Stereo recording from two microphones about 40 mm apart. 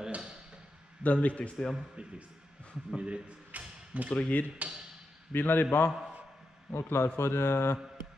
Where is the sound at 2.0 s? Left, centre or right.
Right.